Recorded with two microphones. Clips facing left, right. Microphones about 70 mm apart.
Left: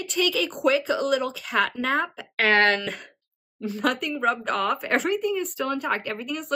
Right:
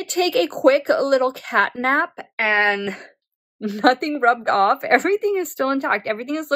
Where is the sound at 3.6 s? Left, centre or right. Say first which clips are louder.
Right 8 dB; right.